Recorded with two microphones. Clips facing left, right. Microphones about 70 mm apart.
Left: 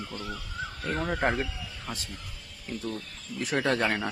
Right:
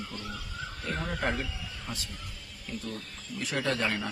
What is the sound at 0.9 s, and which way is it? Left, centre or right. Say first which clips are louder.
Speech: left 4 dB; left.